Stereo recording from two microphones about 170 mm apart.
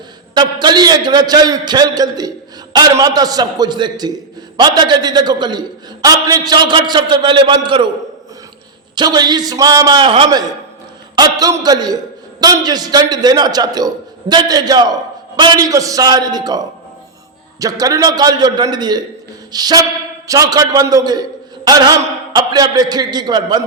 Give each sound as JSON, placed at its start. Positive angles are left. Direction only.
{"t": 0.3, "sound": "a man's voice", "side_deg": -25}
{"t": 9.0, "sound": "a man's voice", "side_deg": -25}